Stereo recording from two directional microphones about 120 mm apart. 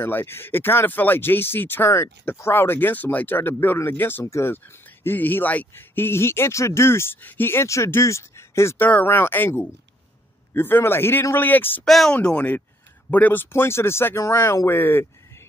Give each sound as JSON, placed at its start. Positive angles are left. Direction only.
{"t": 0.0, "sound": "a man's voice", "side_deg": 20}
{"t": 11.8, "sound": "a man's voice", "side_deg": 5}